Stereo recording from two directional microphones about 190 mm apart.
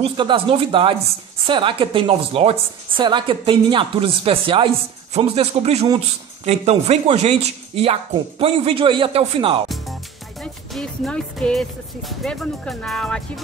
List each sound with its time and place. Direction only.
0.0 s a woman's voice: 25° right (ahead or behind)
10.4 s speech: 5° left (ahead or behind)